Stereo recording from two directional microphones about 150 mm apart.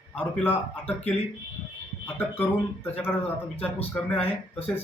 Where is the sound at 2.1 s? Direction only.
15° left (ahead or behind).